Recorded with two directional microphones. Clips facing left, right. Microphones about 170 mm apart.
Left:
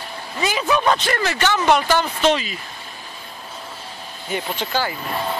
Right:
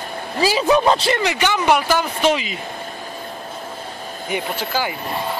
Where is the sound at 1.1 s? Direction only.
15° right (ahead or behind).